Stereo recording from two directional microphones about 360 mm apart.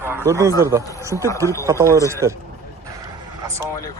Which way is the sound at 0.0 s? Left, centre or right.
Centre.